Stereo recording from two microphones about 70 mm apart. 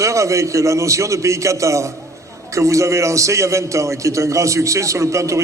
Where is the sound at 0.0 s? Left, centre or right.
Right.